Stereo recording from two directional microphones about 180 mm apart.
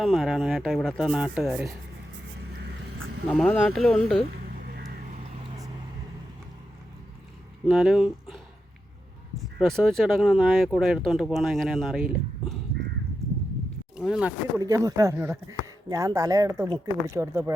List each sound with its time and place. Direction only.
0.0 s speech: centre (ahead or behind)
3.3 s speech: 5° left (ahead or behind)
7.7 s speech: centre (ahead or behind)
9.6 s speech: centre (ahead or behind)
13.9 s speech: 5° right (ahead or behind)
14.6 s speech: 20° right (ahead or behind)